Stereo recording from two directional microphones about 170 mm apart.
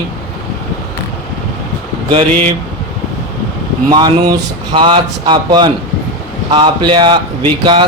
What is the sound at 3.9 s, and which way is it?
Speech, 25° right (ahead or behind).